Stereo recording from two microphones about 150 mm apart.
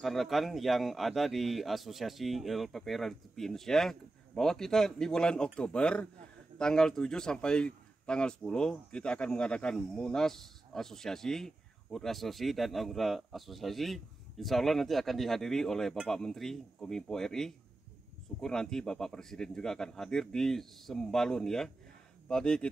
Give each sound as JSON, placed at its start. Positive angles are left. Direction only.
{"t": 0.0, "sound": "a man's voice", "side_deg": 0}